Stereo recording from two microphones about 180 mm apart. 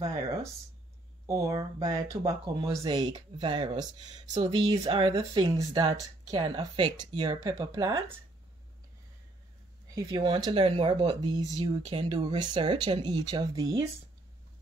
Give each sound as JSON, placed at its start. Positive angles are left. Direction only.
{"t": 1.2, "sound": "speech", "side_deg": -15}
{"t": 9.9, "sound": "speech", "side_deg": -25}